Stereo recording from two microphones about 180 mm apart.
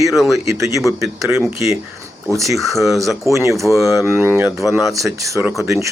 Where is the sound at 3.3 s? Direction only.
15° right (ahead or behind).